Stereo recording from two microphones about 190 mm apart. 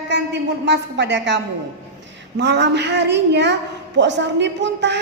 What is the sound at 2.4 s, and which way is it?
A woman's voice, 65° right (ahead or behind).